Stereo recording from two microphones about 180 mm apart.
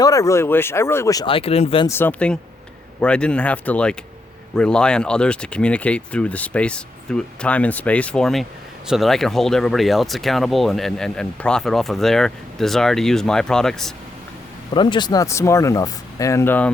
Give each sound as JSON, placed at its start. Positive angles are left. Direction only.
{"t": 0.0, "sound": "speech", "side_deg": 20}
{"t": 1.9, "sound": "speech", "side_deg": 10}
{"t": 14.7, "sound": "speech", "side_deg": 25}